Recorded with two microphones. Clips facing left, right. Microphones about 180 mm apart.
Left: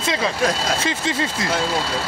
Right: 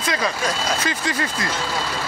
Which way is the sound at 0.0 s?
25° left (ahead or behind).